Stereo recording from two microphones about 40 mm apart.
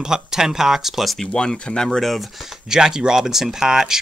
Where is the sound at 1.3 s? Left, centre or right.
Centre.